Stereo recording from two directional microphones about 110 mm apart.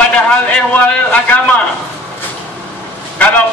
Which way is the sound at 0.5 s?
15° left (ahead or behind).